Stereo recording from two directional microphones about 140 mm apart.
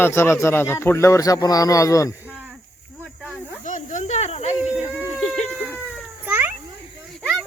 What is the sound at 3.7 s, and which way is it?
Cricket, 60° left (ahead or behind).